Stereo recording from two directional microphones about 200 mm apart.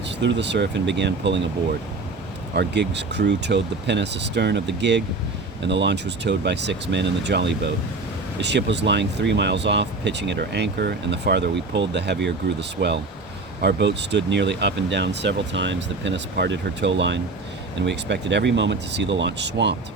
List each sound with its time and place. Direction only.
0.2 s speech: 60° right (ahead or behind)
2.6 s speech: 60° right (ahead or behind)